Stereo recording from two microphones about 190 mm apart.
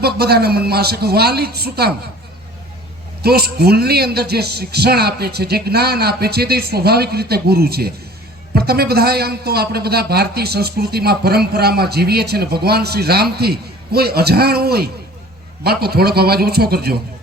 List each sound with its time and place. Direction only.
0.0 s a man's voice: 55° right (ahead or behind)
3.2 s a man's voice: 55° right (ahead or behind)